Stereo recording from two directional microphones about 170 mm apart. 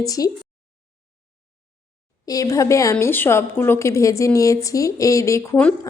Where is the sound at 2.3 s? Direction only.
20° left (ahead or behind).